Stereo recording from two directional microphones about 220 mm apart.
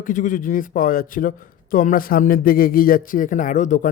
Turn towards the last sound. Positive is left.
turn(degrees=35)  # may be behind; listen again after turning